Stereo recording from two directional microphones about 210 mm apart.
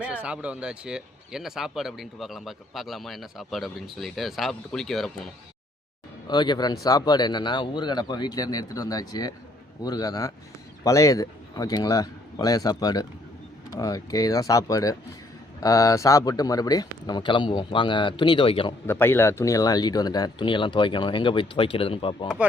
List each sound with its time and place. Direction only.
0.0 s speech: 5° right (ahead or behind)
6.2 s speech: 20° left (ahead or behind)
18.9 s speech: 10° left (ahead or behind)